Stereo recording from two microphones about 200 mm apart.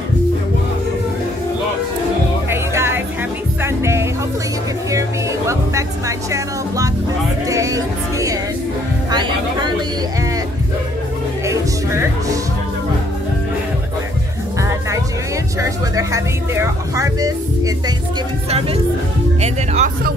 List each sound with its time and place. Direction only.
2.5 s music: 10° right (ahead or behind)
5.5 s music: 15° right (ahead or behind)
14.6 s music: 15° right (ahead or behind)
19.4 s music: 30° right (ahead or behind)